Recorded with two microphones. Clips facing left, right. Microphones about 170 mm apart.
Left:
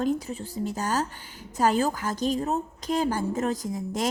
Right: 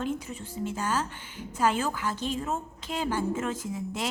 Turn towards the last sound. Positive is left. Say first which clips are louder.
# left 4 dB
turn(degrees=40)  # may be behind; listen again after turning